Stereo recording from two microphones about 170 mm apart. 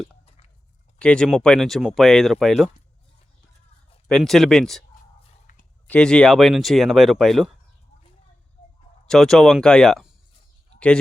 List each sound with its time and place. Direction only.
0.9 s speech: 5° left (ahead or behind)
4.1 s speech: centre (ahead or behind)
5.5 s a sound: 50° left (ahead or behind)
5.9 s speech: 5° left (ahead or behind)
9.0 s a man's voice: centre (ahead or behind)